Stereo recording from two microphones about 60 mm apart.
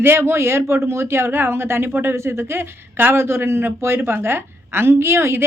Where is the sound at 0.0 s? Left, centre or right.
Right.